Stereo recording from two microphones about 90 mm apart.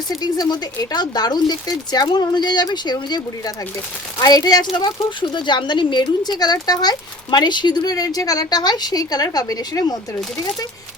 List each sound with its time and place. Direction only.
0.2 s speech: 45° left (ahead or behind)
5.3 s speech: 60° left (ahead or behind); by 10.0 s 45° left (ahead or behind)